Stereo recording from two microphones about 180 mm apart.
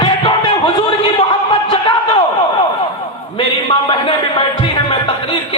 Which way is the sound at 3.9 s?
30° left (ahead or behind).